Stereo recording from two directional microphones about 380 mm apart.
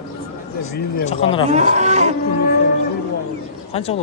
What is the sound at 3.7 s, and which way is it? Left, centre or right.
Speech, centre.